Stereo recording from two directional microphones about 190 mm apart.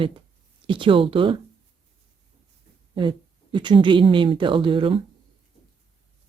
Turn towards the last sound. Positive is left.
turn(degrees=-25)  # may be behind; listen again after turning